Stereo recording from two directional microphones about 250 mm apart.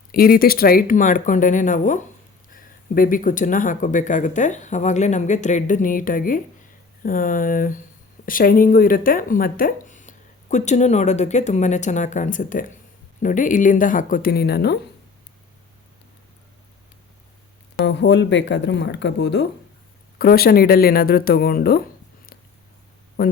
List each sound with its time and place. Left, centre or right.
0.1 s speech: left
17.8 s speech: left
23.2 s speech: left